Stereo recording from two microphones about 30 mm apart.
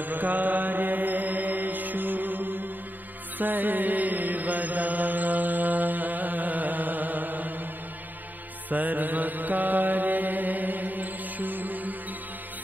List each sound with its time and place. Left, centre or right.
0.0 s music: right
3.3 s mantra: right
8.6 s mantra: right